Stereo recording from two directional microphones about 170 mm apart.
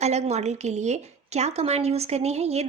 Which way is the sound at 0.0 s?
40° right (ahead or behind).